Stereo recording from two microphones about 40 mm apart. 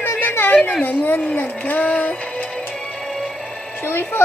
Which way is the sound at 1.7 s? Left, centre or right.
Left.